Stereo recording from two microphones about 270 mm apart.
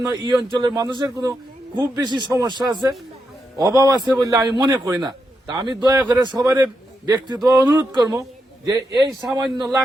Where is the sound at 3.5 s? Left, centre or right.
Centre.